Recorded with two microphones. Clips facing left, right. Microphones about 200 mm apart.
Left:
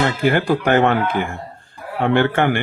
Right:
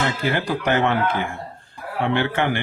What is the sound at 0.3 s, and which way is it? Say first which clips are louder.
Speech: left 6 dB; 55° left (ahead or behind).